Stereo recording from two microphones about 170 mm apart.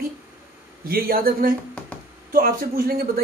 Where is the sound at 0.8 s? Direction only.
60° right (ahead or behind).